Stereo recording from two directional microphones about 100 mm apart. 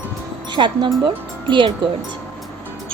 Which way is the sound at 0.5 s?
50° right (ahead or behind).